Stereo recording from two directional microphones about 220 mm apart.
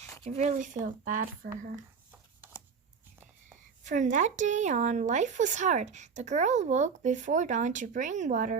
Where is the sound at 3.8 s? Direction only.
35° right (ahead or behind).